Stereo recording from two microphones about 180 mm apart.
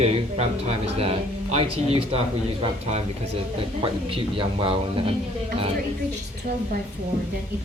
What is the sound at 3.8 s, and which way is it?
Speech, 30° right (ahead or behind).